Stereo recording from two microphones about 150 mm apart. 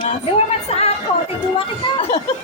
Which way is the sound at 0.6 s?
45° left (ahead or behind).